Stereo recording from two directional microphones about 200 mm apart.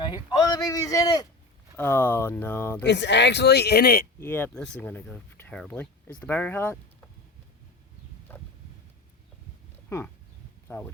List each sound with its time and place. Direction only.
0.0 s speech: 20° left (ahead or behind)
2.8 s speech: 60° left (ahead or behind)
4.2 s speech: 10° left (ahead or behind)
8.3 s a sound: 10° left (ahead or behind)
10.7 s speech: 10° left (ahead or behind)